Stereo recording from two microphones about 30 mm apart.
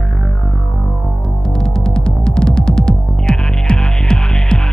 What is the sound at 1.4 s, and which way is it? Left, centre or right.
Throbbing, left.